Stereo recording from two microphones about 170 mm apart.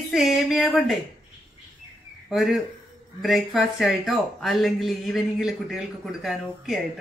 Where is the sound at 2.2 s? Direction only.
Centre (ahead or behind).